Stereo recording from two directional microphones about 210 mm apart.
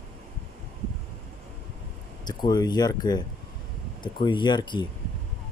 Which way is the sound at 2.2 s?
20° left (ahead or behind).